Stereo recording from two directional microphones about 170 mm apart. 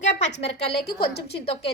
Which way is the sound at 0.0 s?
45° left (ahead or behind).